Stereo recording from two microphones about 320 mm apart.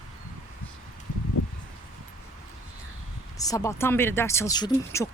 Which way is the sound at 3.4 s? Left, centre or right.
Centre.